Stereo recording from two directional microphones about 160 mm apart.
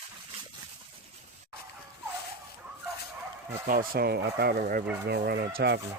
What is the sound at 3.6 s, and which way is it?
Speech, 60° right (ahead or behind).